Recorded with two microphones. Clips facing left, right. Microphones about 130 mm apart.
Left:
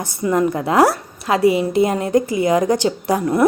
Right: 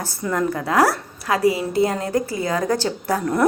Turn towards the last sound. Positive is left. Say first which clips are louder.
# left 3 dB
turn(degrees=15)  # may be behind; listen again after turning